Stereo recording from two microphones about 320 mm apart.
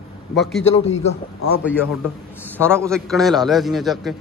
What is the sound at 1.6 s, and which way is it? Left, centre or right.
A man's voice, centre.